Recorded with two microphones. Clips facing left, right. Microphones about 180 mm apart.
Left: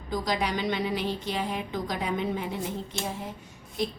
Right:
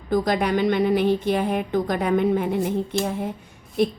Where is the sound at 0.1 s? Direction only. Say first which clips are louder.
Right 8 dB; 55° right (ahead or behind).